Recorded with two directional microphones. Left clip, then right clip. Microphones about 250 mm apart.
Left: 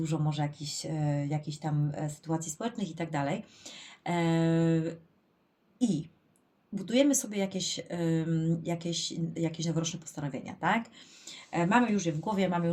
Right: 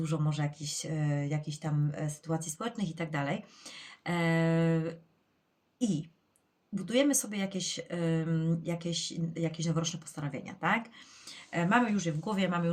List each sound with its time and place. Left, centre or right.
0.0 s speech: centre